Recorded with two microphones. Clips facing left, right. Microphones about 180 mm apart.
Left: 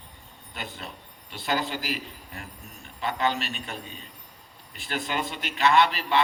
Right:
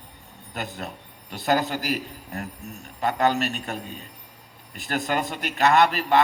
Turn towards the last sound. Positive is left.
turn(degrees=-45)  # may be behind; listen again after turning